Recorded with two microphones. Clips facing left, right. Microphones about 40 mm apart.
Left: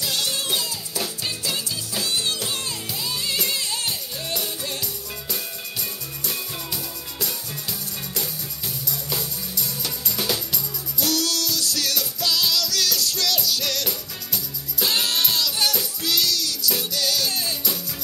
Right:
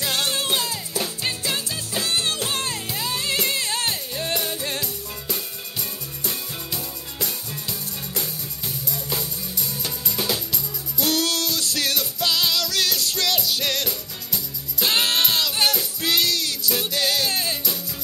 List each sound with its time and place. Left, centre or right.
0.0 s music: right
5.3 s music: centre
8.9 s music: centre
9.6 s music: right
10.1 s music: centre
11.0 s music: right